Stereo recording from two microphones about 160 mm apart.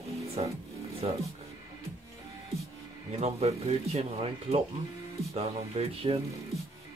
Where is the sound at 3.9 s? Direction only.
40° right (ahead or behind).